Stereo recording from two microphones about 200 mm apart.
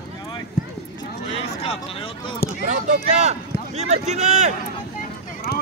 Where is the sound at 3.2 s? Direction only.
35° right (ahead or behind).